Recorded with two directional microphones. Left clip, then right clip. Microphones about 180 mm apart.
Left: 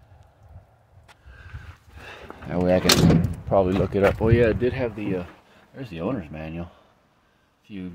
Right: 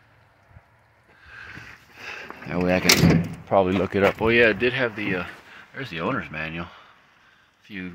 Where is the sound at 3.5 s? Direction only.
15° left (ahead or behind).